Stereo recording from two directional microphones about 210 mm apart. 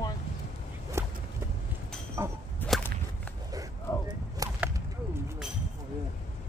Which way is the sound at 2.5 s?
Centre (ahead or behind).